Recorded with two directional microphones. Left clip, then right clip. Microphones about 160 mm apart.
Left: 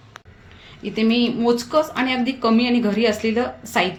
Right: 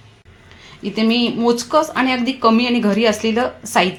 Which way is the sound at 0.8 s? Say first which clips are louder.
Right 2 dB; 40° right (ahead or behind).